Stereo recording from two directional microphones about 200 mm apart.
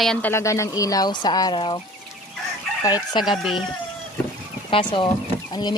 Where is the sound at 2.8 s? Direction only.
20° left (ahead or behind).